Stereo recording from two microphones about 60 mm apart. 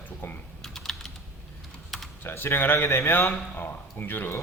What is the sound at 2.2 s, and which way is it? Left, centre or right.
Speech, left.